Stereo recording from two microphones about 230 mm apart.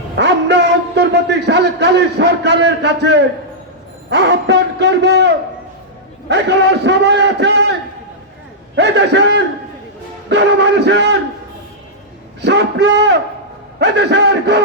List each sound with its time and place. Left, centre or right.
0.2 s a sound: right
4.1 s a man's voice: right
8.7 s a man's voice: right
12.4 s a man's voice: right